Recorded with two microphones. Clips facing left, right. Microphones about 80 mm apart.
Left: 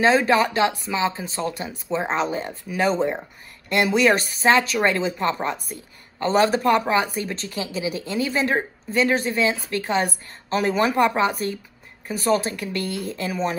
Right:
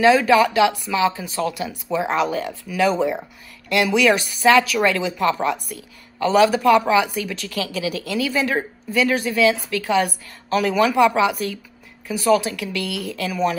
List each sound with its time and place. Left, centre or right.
0.0 s a woman's voice: left